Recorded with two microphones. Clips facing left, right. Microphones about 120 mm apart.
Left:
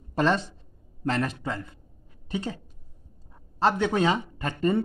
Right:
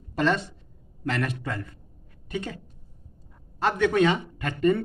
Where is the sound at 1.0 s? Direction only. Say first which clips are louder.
Left 1 dB; 30° left (ahead or behind).